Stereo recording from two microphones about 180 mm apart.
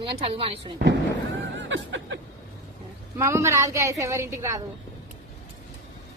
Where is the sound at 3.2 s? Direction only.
15° right (ahead or behind).